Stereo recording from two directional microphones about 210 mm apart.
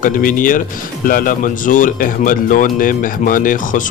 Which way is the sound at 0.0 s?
40° left (ahead or behind).